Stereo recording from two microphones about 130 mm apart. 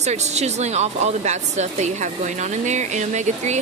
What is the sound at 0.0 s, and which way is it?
Speech, 60° right (ahead or behind).